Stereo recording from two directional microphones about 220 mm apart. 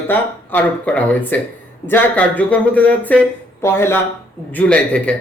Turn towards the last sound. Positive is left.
turn(degrees=5)  # may be behind; listen again after turning